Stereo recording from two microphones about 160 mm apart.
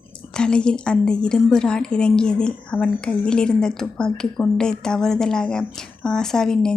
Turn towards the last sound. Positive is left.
turn(degrees=5)  # may be behind; listen again after turning